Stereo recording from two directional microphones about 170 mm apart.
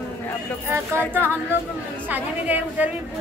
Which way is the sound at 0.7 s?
15° right (ahead or behind).